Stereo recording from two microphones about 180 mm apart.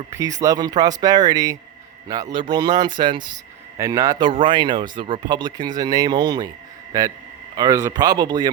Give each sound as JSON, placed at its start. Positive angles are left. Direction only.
{"t": 0.1, "sound": "speech", "side_deg": -20}
{"t": 7.5, "sound": "speech", "side_deg": -20}